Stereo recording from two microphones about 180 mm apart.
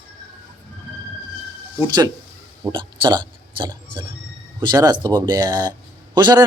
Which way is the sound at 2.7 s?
25° right (ahead or behind).